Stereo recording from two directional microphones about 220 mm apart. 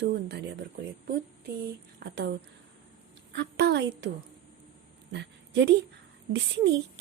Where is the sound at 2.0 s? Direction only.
50° right (ahead or behind).